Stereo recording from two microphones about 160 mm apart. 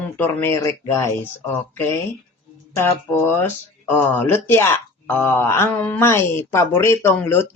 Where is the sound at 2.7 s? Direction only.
15° left (ahead or behind).